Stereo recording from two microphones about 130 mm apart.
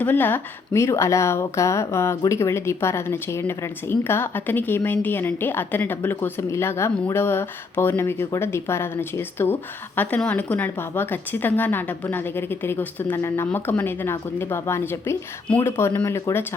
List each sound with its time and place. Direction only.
0.0 s a woman's voice: 15° left (ahead or behind)